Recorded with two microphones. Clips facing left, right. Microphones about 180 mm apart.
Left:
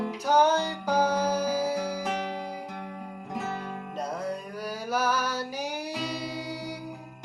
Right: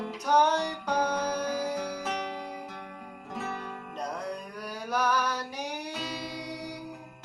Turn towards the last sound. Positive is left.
turn(degrees=5)  # may be behind; listen again after turning